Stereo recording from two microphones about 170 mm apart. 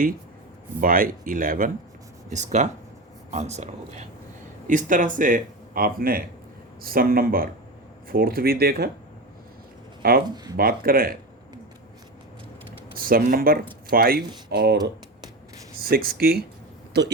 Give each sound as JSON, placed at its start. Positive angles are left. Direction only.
{"t": 0.8, "sound": "speech", "side_deg": -55}
{"t": 2.3, "sound": "speech", "side_deg": -45}
{"t": 10.0, "sound": "speech", "side_deg": -60}
{"t": 13.0, "sound": "speech", "side_deg": -55}
{"t": 15.8, "sound": "speech", "side_deg": -60}